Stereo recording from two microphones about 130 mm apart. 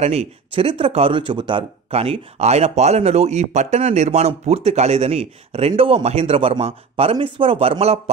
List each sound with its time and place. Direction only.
0.0 s speech: 55° right (ahead or behind)
5.7 s speech: 40° right (ahead or behind)